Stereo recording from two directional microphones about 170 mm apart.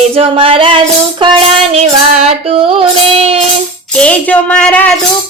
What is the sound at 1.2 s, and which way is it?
Music, 30° right (ahead or behind).